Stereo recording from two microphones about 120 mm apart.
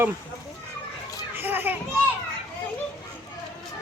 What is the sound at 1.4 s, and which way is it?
Children playing, 15° right (ahead or behind).